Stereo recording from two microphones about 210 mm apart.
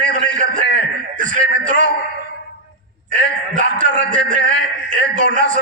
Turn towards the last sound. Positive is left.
turn(degrees=-40)  # may be behind; listen again after turning